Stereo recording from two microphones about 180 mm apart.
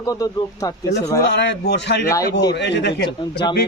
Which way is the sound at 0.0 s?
20° left (ahead or behind).